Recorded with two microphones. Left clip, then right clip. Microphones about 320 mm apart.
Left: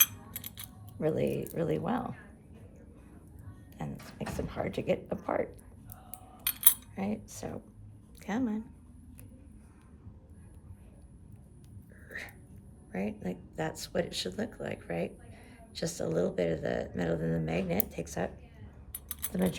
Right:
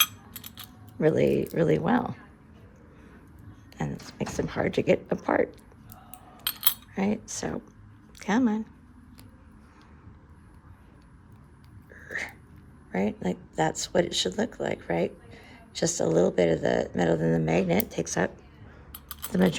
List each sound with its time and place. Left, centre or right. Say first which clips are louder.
0.4 s keys jangling: right 6 dB; centre
0.9 s speech: right 8 dB; right
3.8 s beatboxing: right 8 dB; right
4.4 s speech: right 9 dB; right
6.9 s speech: right 8 dB; right
12.0 s a sound: right 9 dB; right
12.9 s speech: right 8 dB; right
19.3 s speech: right 8 dB; right